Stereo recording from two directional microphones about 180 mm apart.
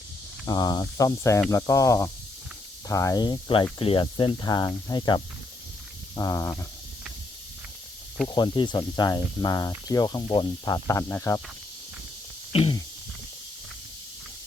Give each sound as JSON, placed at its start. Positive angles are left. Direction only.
{"t": 0.4, "sound": "speech", "side_deg": 20}
{"t": 8.4, "sound": "speech", "side_deg": 25}
{"t": 12.5, "sound": "a sound", "side_deg": 35}